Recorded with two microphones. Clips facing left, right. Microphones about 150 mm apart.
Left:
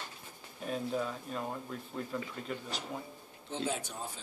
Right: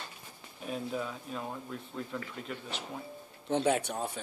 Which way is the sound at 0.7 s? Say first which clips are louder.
Left 1 dB; centre (ahead or behind).